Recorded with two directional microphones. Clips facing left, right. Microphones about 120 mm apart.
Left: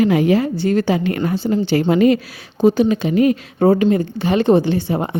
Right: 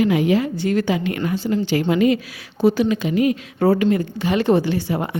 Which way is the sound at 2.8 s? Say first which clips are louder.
Left 3 dB; 35° left (ahead or behind).